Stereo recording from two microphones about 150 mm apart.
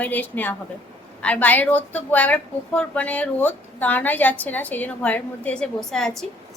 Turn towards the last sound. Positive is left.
turn(degrees=5)  # may be behind; listen again after turning